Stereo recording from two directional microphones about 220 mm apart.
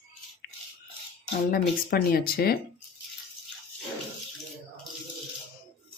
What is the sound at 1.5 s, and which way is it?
A woman's voice, 45° left (ahead or behind).